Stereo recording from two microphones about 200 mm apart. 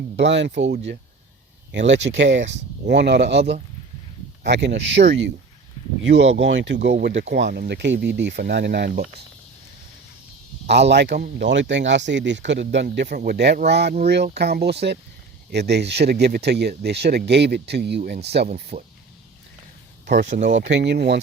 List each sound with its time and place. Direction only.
0.2 s speech: 60° right (ahead or behind)
4.4 s speech: 60° right (ahead or behind)
10.7 s speech: 60° right (ahead or behind)
20.2 s speech: 60° right (ahead or behind)